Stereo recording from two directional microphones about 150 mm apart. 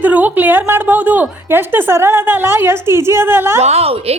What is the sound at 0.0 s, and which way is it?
A woman's voice, 10° right (ahead or behind).